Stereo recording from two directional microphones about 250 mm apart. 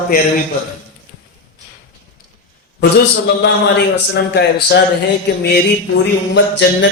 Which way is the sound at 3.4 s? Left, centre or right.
Left.